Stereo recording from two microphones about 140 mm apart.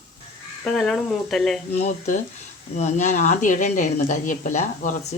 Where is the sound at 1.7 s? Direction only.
50° left (ahead or behind).